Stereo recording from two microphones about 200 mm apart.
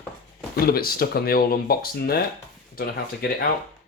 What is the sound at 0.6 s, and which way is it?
Speech, 50° left (ahead or behind).